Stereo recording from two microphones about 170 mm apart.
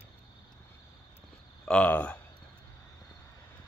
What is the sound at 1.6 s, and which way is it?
Speech, 5° left (ahead or behind).